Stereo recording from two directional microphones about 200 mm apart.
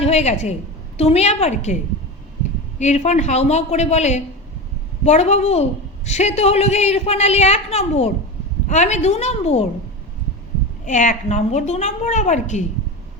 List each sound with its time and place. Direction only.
0.0 s a woman's voice: 35° left (ahead or behind)
2.7 s speech: 35° left (ahead or behind)
10.8 s speech: 40° left (ahead or behind)